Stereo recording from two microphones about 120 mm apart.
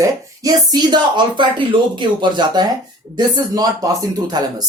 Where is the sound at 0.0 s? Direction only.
30° right (ahead or behind).